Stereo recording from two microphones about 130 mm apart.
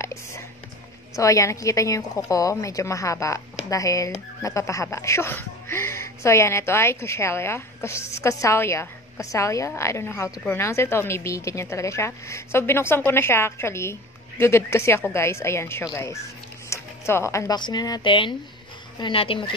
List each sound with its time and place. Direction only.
0.0 s whispering: 20° left (ahead or behind)
1.1 s speech: 25° left (ahead or behind)
16.6 s music: 20° left (ahead or behind)
17.6 s speech: 35° left (ahead or behind)